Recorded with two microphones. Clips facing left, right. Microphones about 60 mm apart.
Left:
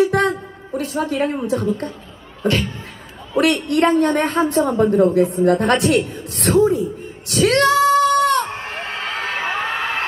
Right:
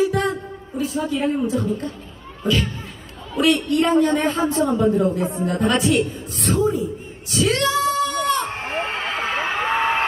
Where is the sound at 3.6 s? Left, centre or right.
Left.